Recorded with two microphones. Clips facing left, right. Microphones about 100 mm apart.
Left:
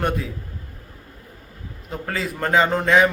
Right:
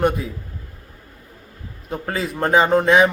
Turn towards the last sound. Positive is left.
turn(degrees=-20)  # may be behind; listen again after turning